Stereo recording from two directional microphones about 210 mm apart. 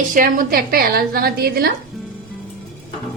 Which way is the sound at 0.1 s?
40° right (ahead or behind).